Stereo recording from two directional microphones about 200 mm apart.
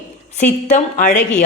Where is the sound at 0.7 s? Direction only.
40° left (ahead or behind).